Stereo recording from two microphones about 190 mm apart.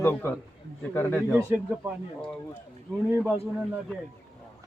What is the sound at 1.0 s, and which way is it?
Speech, 10° left (ahead or behind).